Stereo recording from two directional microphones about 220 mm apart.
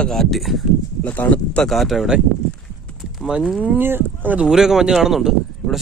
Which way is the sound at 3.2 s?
5° right (ahead or behind).